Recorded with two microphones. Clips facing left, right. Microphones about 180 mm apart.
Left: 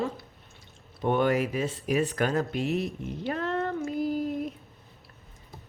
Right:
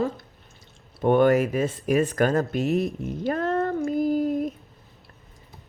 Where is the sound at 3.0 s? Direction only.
45° right (ahead or behind).